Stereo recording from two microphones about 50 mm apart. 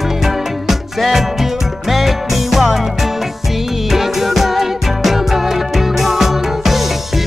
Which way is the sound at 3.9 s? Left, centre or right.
Centre.